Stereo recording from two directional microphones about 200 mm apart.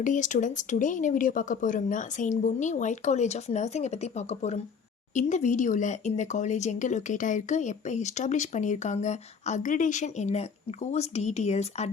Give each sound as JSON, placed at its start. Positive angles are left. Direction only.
{"t": 0.0, "sound": "speech", "side_deg": 40}